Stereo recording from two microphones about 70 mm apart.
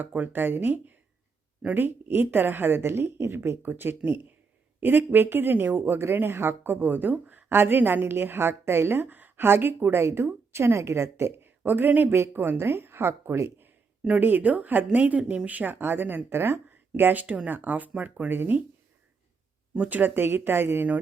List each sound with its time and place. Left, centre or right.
0.1 s speech: right
11.6 s speech: right
12.6 s speech: right
14.2 s speech: right
19.7 s speech: right